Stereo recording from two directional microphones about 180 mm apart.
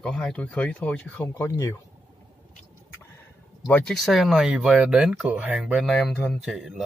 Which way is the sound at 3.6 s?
5° left (ahead or behind).